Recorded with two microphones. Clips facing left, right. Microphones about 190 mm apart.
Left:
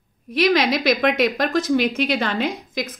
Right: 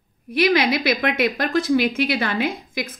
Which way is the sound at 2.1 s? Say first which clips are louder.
Left 1 dB; 10° right (ahead or behind).